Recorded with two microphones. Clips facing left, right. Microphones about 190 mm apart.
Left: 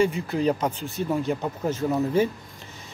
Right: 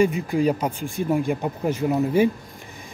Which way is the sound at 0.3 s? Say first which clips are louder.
Right 2 dB; 10° right (ahead or behind).